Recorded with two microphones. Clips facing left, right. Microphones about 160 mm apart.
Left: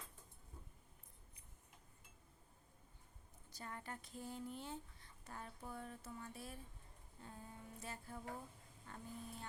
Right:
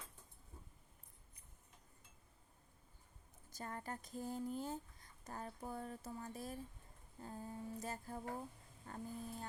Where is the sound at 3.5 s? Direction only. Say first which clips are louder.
Right 4 dB; 45° right (ahead or behind).